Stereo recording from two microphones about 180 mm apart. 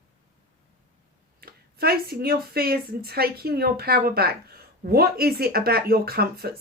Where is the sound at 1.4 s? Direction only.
60° right (ahead or behind).